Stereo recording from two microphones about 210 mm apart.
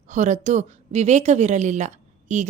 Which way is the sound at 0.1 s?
35° right (ahead or behind).